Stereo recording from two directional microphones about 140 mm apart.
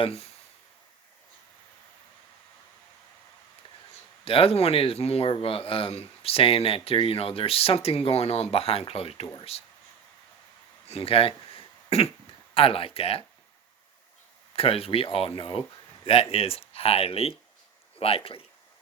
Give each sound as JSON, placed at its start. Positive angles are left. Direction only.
{"t": 0.0, "sound": "speech", "side_deg": 45}
{"t": 4.3, "sound": "speech", "side_deg": 45}
{"t": 10.8, "sound": "throat clearing", "side_deg": 45}
{"t": 12.5, "sound": "speech", "side_deg": 40}
{"t": 14.5, "sound": "speech", "side_deg": 45}